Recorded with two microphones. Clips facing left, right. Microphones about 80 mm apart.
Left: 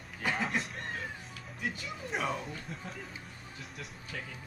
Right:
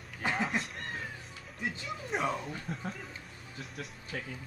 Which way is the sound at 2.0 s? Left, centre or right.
Centre.